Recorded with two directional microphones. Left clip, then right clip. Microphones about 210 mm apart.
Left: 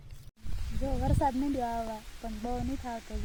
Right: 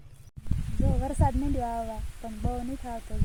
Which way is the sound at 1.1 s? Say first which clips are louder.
Left 1 dB; 5° right (ahead or behind).